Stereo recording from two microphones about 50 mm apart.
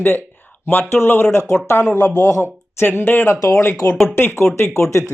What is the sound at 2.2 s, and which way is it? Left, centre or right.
Speech, left.